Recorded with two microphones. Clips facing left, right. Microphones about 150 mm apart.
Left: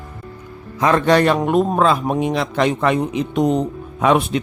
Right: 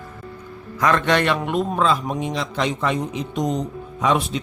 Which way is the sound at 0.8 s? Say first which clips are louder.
Left 4 dB; 35° left (ahead or behind).